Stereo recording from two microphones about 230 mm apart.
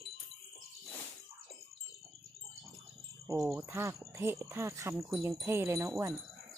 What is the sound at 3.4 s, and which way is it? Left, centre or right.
Speech, centre.